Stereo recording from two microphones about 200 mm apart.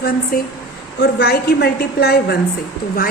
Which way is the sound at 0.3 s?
50° left (ahead or behind).